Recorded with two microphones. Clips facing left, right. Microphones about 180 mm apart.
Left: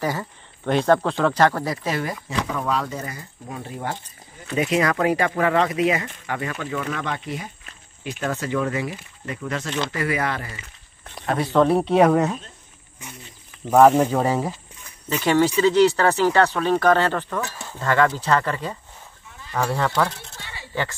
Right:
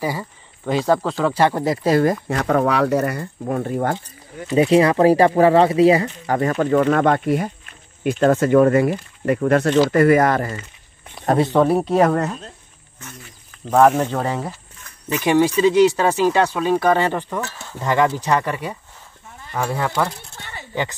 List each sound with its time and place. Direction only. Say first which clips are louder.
0.0 s speech: right 1 dB; 10° right (ahead or behind)
1.6 s speech: right 9 dB; 30° right (ahead or behind)
2.2 s speech: right 7 dB; 65° right (ahead or behind)
4.6 s speech: right 7 dB; 30° right (ahead or behind); by 10.6 s 45° right (ahead or behind)
11.6 s speech: even; centre (ahead or behind)
15.0 s speech: right 2 dB; 15° right (ahead or behind)
20.3 s a sound: right 3 dB; 50° right (ahead or behind)